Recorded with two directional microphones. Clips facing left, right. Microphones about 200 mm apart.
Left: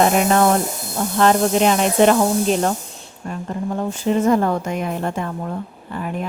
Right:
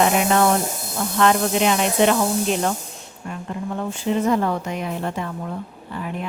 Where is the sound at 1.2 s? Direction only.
40° left (ahead or behind).